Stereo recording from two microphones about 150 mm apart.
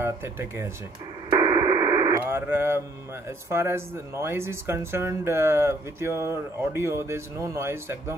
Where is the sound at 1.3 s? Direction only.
25° right (ahead or behind).